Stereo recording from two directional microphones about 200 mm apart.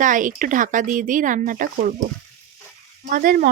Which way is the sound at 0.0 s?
40° right (ahead or behind).